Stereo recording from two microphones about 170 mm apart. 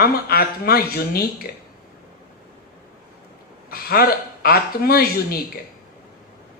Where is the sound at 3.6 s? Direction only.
60° left (ahead or behind).